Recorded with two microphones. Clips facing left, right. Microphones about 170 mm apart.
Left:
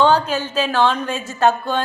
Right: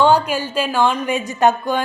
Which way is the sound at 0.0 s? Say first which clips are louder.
Right 1 dB; 10° right (ahead or behind).